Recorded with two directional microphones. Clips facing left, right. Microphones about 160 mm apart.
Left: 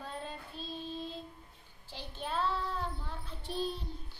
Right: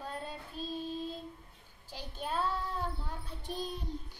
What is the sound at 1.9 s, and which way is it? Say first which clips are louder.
Child singing: right 1 dB; 10° right (ahead or behind).